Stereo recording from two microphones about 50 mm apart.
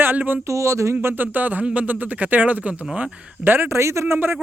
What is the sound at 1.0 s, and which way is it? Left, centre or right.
Speech, right.